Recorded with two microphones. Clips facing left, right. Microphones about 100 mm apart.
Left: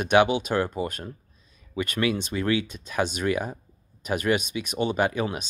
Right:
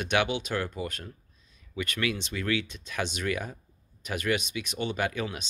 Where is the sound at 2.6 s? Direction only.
50° left (ahead or behind).